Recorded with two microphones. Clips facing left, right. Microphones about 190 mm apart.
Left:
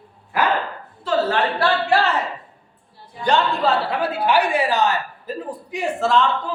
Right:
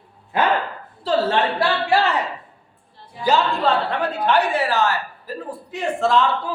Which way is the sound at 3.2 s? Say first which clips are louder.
Even; centre (ahead or behind).